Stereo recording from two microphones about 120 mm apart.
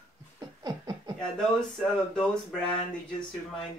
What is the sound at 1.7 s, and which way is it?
Speech, centre (ahead or behind).